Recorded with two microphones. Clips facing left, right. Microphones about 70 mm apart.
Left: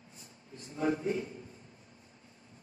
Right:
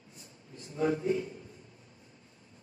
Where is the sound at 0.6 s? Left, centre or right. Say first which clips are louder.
Right 2 dB; left.